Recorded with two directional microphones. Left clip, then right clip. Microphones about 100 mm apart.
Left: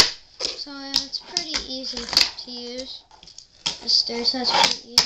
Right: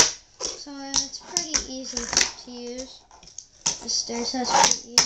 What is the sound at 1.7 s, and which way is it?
Speech, centre (ahead or behind).